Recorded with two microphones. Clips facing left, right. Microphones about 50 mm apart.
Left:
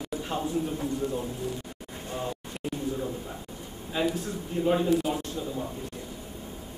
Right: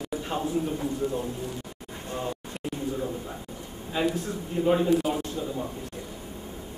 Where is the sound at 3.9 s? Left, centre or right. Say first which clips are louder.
Right 1 dB; centre.